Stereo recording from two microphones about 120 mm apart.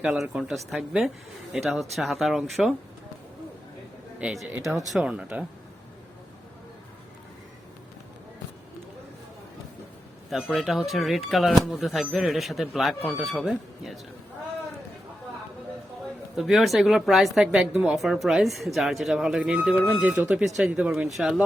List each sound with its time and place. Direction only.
0.0 s speech: 5° right (ahead or behind)
4.2 s speech: 5° right (ahead or behind)
4.6 s speech: 25° right (ahead or behind)
4.9 s speech: 5° right (ahead or behind)
10.5 s speech: centre (ahead or behind)
16.3 s speech: 5° right (ahead or behind)